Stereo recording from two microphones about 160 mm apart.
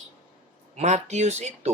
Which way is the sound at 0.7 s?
45° right (ahead or behind).